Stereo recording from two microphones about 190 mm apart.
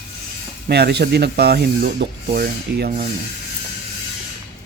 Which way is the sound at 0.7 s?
60° right (ahead or behind).